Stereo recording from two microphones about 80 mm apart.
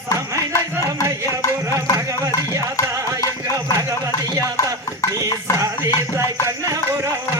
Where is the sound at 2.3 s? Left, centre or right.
Left.